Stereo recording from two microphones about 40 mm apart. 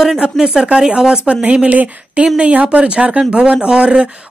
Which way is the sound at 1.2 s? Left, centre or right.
Right.